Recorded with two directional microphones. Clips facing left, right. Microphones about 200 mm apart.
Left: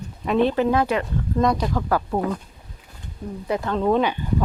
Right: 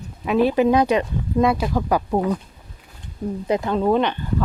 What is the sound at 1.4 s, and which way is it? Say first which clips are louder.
Speech: right 2 dB; 5° right (ahead or behind).